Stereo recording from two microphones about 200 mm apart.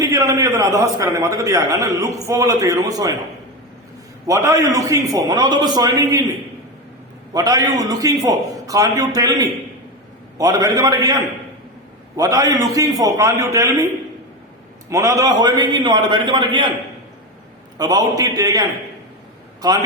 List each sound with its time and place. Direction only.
0.0 s a man's voice: 15° right (ahead or behind)
4.3 s a man's voice: 15° right (ahead or behind)
7.3 s a man's voice: 15° right (ahead or behind)
14.8 s a man's voice: 15° right (ahead or behind)
17.7 s a man's voice: 20° right (ahead or behind)